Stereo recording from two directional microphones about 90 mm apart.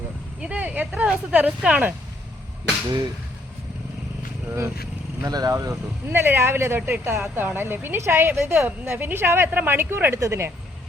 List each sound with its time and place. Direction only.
0.3 s speech: 15° right (ahead or behind)
4.4 s speech: 30° right (ahead or behind)
5.2 s speech: 45° right (ahead or behind)
6.1 s speech: 25° right (ahead or behind)